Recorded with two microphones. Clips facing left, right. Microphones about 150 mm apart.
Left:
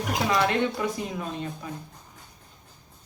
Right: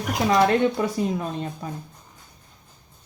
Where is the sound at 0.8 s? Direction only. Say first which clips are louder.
Right 5 dB; 35° right (ahead or behind).